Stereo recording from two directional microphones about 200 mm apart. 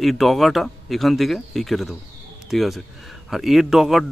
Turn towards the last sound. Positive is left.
turn(degrees=0)  # may be behind; listen again after turning